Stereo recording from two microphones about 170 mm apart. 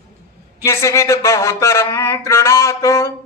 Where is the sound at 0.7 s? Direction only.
15° left (ahead or behind).